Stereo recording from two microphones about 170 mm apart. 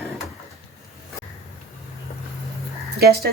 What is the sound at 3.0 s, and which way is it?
Speech, 70° right (ahead or behind).